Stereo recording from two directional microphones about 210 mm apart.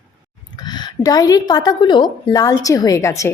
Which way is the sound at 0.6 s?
20° left (ahead or behind).